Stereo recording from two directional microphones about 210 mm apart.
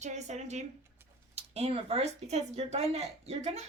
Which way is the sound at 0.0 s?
35° right (ahead or behind).